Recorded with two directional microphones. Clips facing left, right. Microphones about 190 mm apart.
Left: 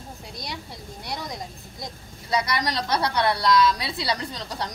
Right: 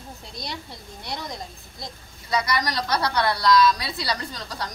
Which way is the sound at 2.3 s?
30° left (ahead or behind).